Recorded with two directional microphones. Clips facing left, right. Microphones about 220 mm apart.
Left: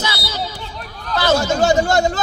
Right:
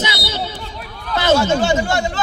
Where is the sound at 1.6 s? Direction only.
40° left (ahead or behind).